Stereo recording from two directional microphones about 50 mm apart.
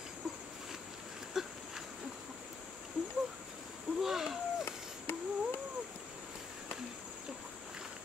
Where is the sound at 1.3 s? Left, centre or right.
Centre.